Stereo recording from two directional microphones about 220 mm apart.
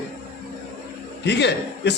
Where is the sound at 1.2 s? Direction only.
50° left (ahead or behind).